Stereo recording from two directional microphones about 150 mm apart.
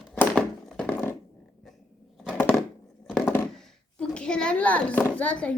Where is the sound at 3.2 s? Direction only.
15° left (ahead or behind).